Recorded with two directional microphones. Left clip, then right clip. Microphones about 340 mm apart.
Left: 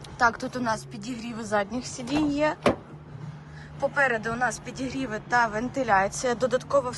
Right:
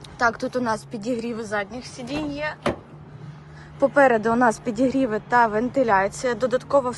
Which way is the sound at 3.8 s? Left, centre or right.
Centre.